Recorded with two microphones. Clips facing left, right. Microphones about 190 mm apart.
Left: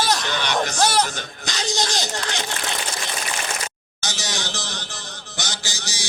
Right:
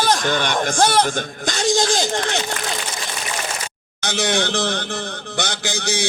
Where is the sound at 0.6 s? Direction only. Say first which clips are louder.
Right 5 dB; 50° right (ahead or behind).